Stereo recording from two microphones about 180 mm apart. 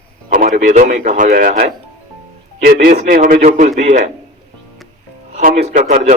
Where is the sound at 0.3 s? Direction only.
45° right (ahead or behind).